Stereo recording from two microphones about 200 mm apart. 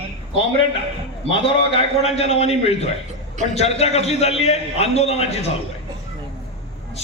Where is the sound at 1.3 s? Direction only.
25° left (ahead or behind).